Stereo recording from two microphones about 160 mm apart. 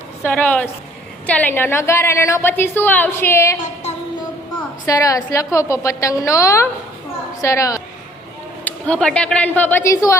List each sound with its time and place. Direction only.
0.2 s a woman's voice: 10° left (ahead or behind)
4.9 s a woman's voice: 20° left (ahead or behind)
8.6 s a woman's voice: 5° left (ahead or behind)